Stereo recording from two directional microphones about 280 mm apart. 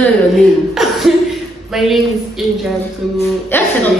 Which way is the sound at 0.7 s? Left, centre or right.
Centre.